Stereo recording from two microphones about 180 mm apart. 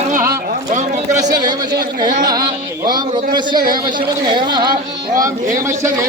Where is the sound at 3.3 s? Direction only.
25° right (ahead or behind).